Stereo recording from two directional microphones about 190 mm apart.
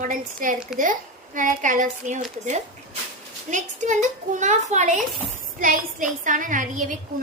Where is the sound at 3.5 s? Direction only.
40° right (ahead or behind).